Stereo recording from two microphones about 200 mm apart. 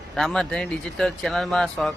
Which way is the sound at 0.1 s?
Centre (ahead or behind).